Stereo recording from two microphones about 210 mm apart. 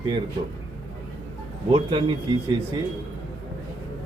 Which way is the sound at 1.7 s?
25° right (ahead or behind).